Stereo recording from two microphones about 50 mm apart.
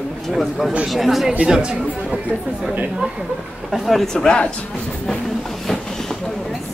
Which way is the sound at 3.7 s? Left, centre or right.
Centre.